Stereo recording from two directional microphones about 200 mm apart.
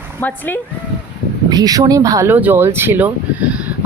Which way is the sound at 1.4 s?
20° right (ahead or behind).